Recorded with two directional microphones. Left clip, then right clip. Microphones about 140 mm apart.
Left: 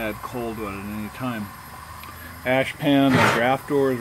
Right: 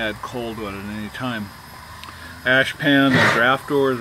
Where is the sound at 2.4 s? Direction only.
5° left (ahead or behind).